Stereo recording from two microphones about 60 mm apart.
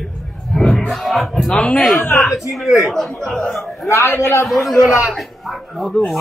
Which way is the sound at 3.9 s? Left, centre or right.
Left.